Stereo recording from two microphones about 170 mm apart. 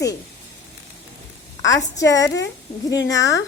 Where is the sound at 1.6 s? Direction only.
20° left (ahead or behind).